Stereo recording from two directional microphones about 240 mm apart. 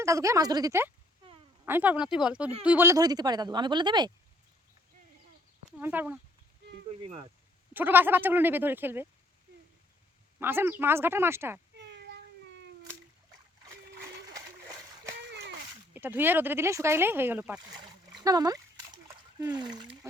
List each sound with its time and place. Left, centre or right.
0.0 s speech: centre
5.8 s speech: centre
7.7 s speech: centre
10.4 s speech: centre
11.8 s cat: right
15.3 s a sound: right
15.9 s speech: centre
17.7 s splash: centre
19.4 s speech: centre